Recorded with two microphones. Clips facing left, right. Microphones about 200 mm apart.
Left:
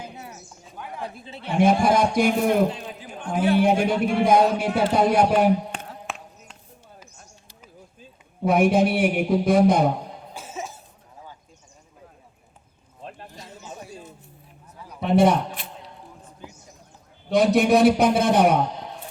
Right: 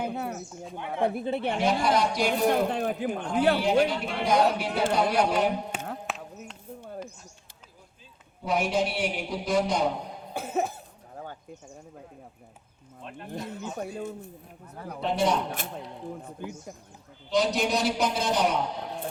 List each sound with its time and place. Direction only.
0.0 s bird: 60° right (ahead or behind)
1.0 s speech: 60° right (ahead or behind)
1.5 s a man's voice: 50° left (ahead or behind)
2.6 s speech: 60° right (ahead or behind)
3.6 s a man's voice: 55° left (ahead or behind)
6.1 s a sound: centre (ahead or behind)
8.4 s a man's voice: 55° left (ahead or behind)
10.3 s cough: 60° right (ahead or behind)
13.3 s speech: 60° right (ahead or behind)
15.0 s a man's voice: 55° left (ahead or behind)
16.2 s a sound: 60° right (ahead or behind)
17.2 s a man's voice: 60° left (ahead or behind)